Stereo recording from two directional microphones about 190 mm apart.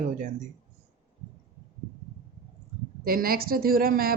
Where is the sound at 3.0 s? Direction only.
50° right (ahead or behind).